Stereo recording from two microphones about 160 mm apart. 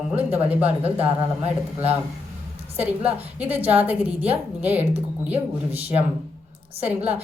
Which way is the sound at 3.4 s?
10° right (ahead or behind).